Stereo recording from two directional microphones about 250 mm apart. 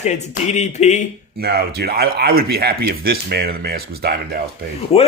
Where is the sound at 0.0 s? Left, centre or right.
Left.